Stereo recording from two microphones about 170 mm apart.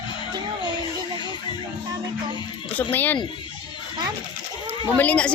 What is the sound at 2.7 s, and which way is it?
Speech, 10° left (ahead or behind).